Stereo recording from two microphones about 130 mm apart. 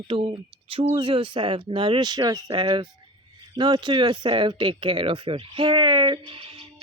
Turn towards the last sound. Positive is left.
turn(degrees=-45)  # may be behind; listen again after turning